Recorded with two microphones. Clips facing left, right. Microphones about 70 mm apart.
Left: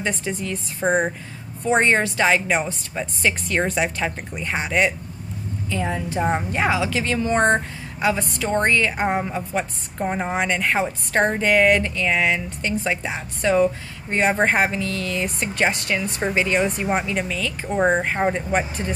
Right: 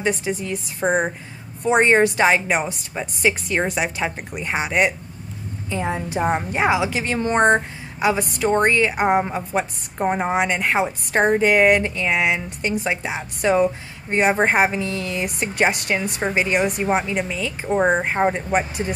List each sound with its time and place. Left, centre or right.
0.2 s a woman's voice: centre
1.7 s a woman's voice: centre
9.2 s a woman's voice: right